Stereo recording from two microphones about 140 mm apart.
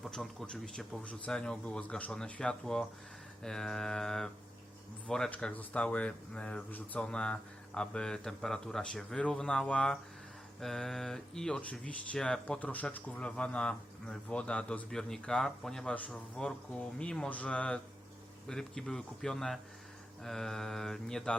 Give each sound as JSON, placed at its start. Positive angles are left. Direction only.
{"t": 0.0, "sound": "speech", "side_deg": 0}